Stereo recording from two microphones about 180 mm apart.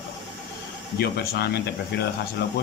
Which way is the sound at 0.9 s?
60° left (ahead or behind).